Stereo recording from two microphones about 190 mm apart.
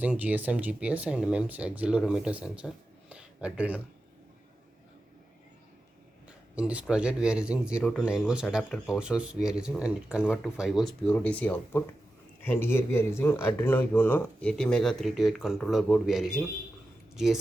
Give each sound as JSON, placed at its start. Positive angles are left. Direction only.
{"t": 0.0, "sound": "speech", "side_deg": -10}
{"t": 6.2, "sound": "speech", "side_deg": -5}